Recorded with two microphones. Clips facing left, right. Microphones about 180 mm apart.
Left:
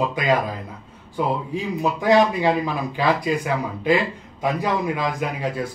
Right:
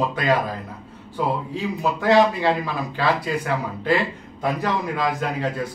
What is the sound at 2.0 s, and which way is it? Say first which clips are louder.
Speech: even; 15° left (ahead or behind).